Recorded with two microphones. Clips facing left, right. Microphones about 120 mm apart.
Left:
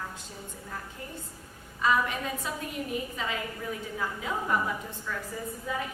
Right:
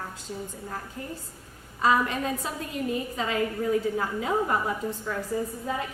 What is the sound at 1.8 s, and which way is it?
A woman's voice, 35° right (ahead or behind).